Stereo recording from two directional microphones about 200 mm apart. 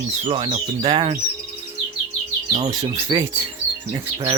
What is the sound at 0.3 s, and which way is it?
Speech, 30° right (ahead or behind).